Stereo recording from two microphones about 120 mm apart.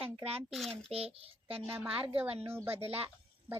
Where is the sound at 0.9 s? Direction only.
55° right (ahead or behind).